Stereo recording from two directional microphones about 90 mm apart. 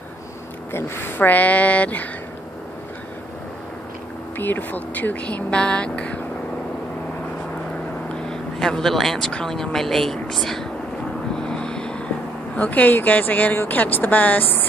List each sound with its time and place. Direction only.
0.7 s speech: 25° left (ahead or behind)
4.4 s speech: 20° left (ahead or behind)
8.1 s speech: 5° left (ahead or behind)
11.3 s vehicle: 10° left (ahead or behind)
12.5 s speech: 15° left (ahead or behind)